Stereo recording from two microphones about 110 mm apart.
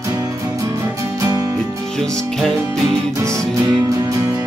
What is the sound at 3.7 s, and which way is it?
Music, 35° right (ahead or behind).